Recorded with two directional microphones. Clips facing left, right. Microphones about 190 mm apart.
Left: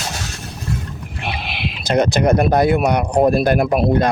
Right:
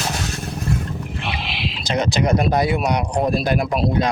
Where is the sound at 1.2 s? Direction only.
55° left (ahead or behind).